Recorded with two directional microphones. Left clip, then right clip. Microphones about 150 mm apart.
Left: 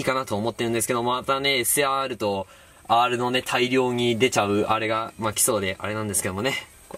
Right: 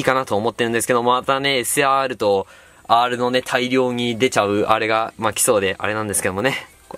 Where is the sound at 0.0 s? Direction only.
35° right (ahead or behind).